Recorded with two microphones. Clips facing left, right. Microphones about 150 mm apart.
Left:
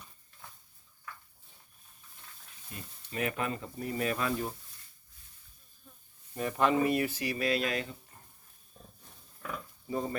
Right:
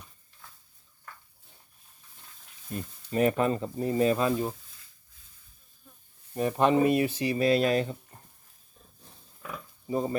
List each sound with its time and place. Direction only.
2.6 s speech: 40° right (ahead or behind); by 4.5 s 25° right (ahead or behind)
6.3 s speech: 20° right (ahead or behind)
9.4 s a sound: 20° right (ahead or behind)